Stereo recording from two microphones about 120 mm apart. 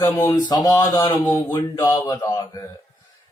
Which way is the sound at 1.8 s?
30° left (ahead or behind).